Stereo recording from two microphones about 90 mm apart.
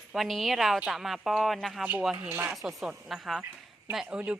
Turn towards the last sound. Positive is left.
turn(degrees=-10)  # may be behind; listen again after turning